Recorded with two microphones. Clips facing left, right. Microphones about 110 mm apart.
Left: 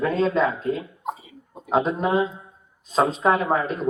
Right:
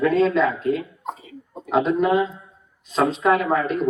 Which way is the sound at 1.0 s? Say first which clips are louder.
Left 1 dB; 15° left (ahead or behind).